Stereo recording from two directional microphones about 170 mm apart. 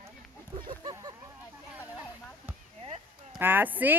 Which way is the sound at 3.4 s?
10° right (ahead or behind).